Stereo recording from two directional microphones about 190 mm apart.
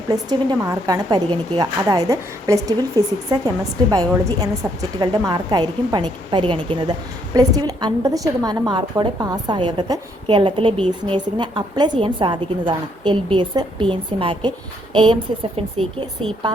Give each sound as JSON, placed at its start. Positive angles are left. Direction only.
{"t": 0.1, "sound": "a woman's voice", "side_deg": -20}